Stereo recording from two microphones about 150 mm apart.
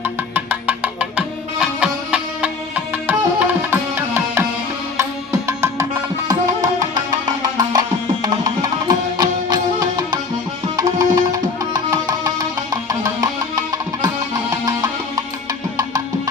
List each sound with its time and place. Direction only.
0.0 s music: 10° right (ahead or behind)
7.1 s music: 25° right (ahead or behind)
10.8 s music: 25° right (ahead or behind)